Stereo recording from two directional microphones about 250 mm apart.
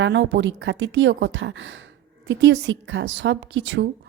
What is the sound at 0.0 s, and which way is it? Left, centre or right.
Speech, right.